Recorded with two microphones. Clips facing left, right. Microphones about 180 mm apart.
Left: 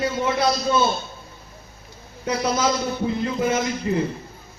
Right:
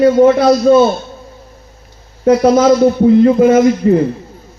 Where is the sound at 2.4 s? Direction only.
50° right (ahead or behind).